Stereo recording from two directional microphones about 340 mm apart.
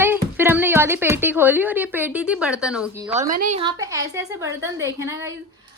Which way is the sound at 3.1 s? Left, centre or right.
Right.